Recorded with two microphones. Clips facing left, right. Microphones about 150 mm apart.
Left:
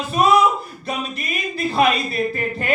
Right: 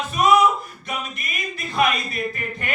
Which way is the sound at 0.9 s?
35° left (ahead or behind).